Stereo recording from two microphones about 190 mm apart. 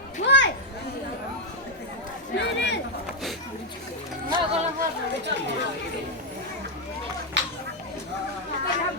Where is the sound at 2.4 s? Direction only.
65° left (ahead or behind).